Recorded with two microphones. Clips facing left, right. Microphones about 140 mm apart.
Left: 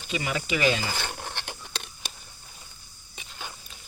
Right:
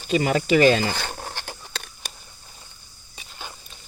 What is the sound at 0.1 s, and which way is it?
Stir, 45° right (ahead or behind).